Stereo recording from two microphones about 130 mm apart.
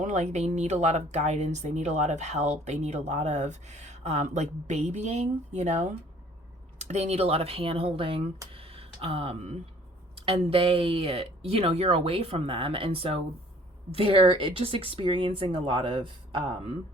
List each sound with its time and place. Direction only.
0.0 s speech: 65° right (ahead or behind); by 8.2 s 45° right (ahead or behind)
8.5 s a sound: 50° right (ahead or behind)
10.2 s speech: 45° right (ahead or behind)